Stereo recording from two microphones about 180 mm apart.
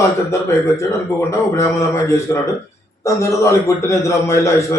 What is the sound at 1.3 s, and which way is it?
A man's voice, 15° left (ahead or behind).